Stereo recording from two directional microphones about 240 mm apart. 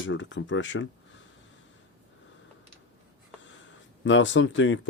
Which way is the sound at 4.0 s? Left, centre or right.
Left.